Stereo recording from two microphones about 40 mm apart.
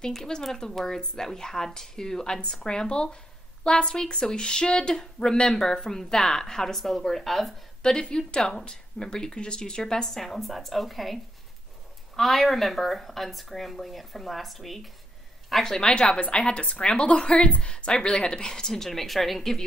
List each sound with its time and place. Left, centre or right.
0.0 s speech: centre
7.8 s speech: centre
10.0 s speech: centre
12.2 s speech: centre
15.9 s speech: left; by 19.6 s centre